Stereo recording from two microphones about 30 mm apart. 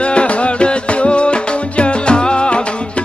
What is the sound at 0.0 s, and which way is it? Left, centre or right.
Music, left.